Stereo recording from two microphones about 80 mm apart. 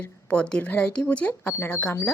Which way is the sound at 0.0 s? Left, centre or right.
Centre.